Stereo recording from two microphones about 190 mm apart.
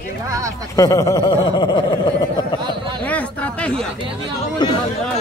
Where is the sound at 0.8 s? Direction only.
15° left (ahead or behind).